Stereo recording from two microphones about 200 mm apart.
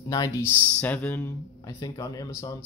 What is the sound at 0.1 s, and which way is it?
Speech, 15° left (ahead or behind).